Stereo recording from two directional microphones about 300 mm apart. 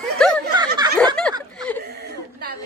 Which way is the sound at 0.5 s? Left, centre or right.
Centre.